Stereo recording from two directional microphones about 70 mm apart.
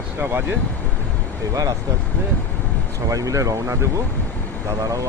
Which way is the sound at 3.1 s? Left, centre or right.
Right.